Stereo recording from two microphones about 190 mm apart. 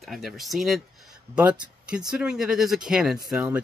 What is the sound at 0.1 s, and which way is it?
Speech, centre (ahead or behind).